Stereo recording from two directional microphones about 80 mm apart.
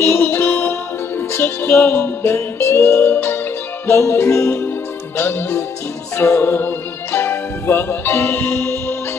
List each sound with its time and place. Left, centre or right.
0.0 s music: left